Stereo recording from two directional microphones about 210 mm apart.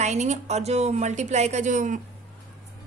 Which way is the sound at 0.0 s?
35° right (ahead or behind).